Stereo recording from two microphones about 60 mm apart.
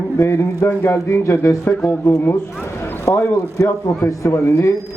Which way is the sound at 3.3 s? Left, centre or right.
Left.